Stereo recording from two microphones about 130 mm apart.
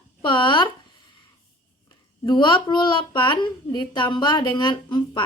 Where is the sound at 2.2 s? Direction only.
35° left (ahead or behind).